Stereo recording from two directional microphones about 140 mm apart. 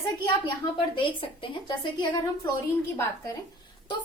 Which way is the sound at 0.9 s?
35° left (ahead or behind).